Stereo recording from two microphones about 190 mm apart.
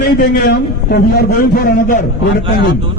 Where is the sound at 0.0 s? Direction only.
55° left (ahead or behind).